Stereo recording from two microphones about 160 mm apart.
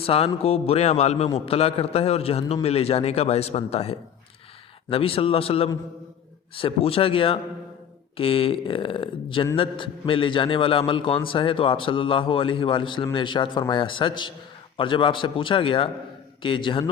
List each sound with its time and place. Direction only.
0.0 s a man's voice: 40° left (ahead or behind)